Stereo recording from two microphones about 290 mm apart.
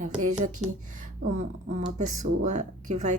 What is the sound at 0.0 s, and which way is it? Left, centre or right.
Speech, right.